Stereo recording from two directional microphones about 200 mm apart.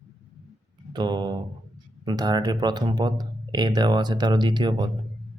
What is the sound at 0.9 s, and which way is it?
Speech, 20° right (ahead or behind).